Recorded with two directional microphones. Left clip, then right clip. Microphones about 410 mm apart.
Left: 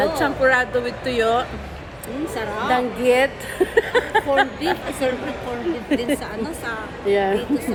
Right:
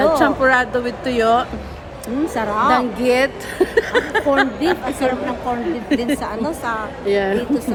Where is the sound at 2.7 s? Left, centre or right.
Centre.